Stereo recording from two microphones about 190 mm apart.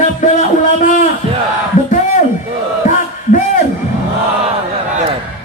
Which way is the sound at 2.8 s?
40° left (ahead or behind).